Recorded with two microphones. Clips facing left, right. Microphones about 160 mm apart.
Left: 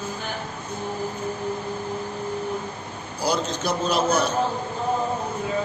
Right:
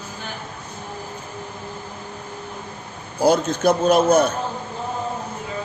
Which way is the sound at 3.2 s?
50° right (ahead or behind).